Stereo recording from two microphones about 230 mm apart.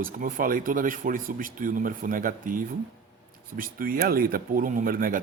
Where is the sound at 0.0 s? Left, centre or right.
Right.